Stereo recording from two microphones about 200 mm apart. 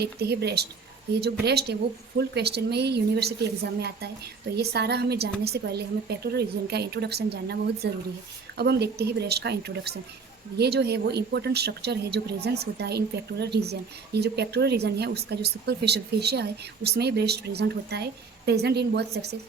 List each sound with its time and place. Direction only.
0.0 s a woman's voice: 55° right (ahead or behind)